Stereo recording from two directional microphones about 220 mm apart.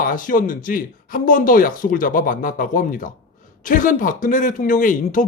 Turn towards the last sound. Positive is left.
turn(degrees=35)  # may be behind; listen again after turning